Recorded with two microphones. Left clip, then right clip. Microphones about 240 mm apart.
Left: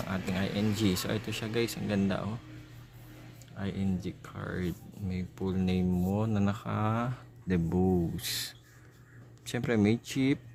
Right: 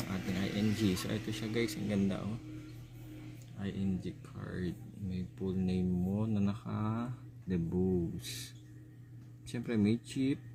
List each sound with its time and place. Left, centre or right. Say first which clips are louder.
0.1 s speech: left 5 dB; left
3.6 s speech: left 4 dB; left